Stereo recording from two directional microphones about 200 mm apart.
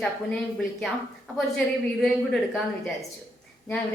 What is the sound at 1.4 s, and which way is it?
A woman's voice, 5° left (ahead or behind).